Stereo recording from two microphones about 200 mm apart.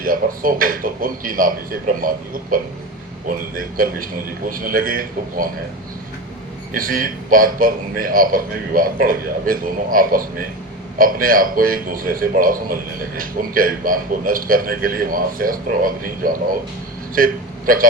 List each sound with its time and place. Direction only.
0.0 s a man's voice: 45° right (ahead or behind)
6.7 s a man's voice: 45° right (ahead or behind)